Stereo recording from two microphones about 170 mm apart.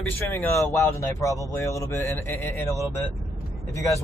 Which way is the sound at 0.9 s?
20° left (ahead or behind).